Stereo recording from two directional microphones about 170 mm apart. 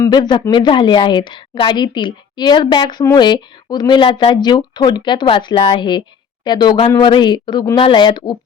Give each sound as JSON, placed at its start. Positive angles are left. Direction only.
{"t": 0.0, "sound": "a woman's voice", "side_deg": 25}